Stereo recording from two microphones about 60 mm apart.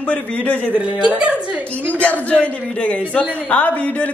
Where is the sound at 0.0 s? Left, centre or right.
Left.